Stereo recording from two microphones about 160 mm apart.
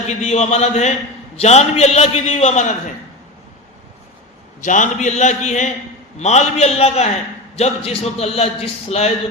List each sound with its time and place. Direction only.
0.1 s a man's voice: 45° left (ahead or behind)
4.6 s a man's voice: 50° left (ahead or behind)